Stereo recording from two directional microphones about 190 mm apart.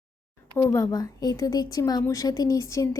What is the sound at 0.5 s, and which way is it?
Speech, 15° left (ahead or behind).